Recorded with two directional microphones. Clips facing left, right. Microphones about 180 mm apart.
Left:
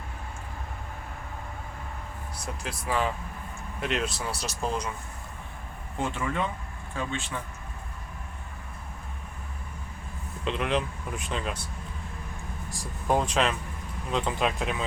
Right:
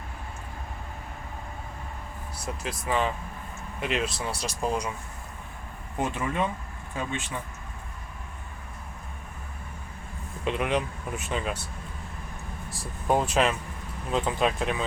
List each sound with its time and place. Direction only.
2.4 s speech: centre (ahead or behind)
6.0 s speech: 20° right (ahead or behind)
10.4 s speech: 5° right (ahead or behind)
12.7 s speech: centre (ahead or behind)